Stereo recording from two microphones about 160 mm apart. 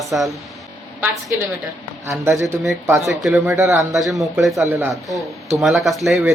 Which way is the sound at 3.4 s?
15° right (ahead or behind).